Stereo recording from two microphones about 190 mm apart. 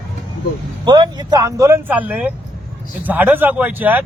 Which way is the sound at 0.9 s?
20° right (ahead or behind).